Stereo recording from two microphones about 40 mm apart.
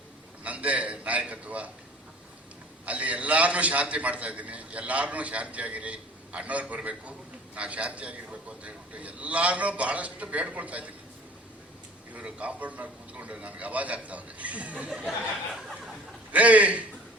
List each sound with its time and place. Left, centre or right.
0.4 s a man's voice: right
2.8 s a man's voice: right
12.1 s a man's voice: right
16.3 s a man's voice: right